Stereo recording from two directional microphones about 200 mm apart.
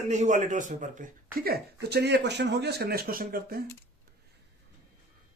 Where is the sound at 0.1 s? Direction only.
35° right (ahead or behind).